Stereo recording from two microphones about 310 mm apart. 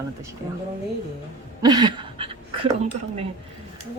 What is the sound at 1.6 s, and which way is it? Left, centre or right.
Speech, centre.